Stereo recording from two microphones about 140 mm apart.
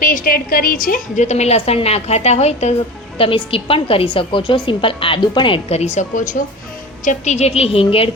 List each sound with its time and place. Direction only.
0.0 s a woman's voice: 75° left (ahead or behind); by 2.7 s 50° left (ahead or behind)
3.2 s a woman's voice: 40° left (ahead or behind)